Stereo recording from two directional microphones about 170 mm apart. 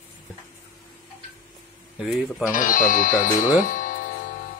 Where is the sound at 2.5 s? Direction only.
55° left (ahead or behind).